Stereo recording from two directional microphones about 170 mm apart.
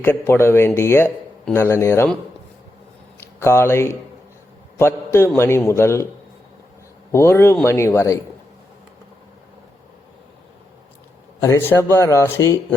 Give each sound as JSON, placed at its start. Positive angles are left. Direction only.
{"t": 0.0, "sound": "a man's voice", "side_deg": 15}
{"t": 3.2, "sound": "a man's voice", "side_deg": 15}
{"t": 7.1, "sound": "a man's voice", "side_deg": 15}
{"t": 11.4, "sound": "a man's voice", "side_deg": 15}